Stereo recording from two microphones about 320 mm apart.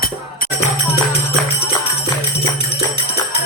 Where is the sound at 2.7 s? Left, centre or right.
Centre.